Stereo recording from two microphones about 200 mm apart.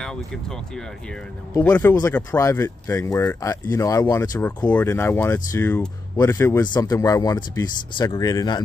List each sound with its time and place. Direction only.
0.0 s speech: 5° left (ahead or behind)
1.5 s speech: 15° left (ahead or behind)